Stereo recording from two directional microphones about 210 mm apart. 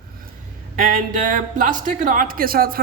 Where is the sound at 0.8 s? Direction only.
40° right (ahead or behind).